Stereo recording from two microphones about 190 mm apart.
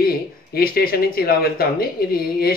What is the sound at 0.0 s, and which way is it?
Speech, 55° left (ahead or behind).